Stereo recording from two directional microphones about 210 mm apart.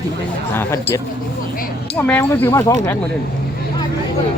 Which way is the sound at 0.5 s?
10° left (ahead or behind).